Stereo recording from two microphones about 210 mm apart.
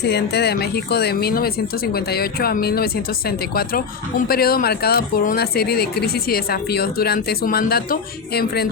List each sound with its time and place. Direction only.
0.0 s speech: 50° left (ahead or behind)